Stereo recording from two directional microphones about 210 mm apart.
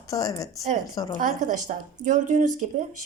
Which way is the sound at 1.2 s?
35° right (ahead or behind).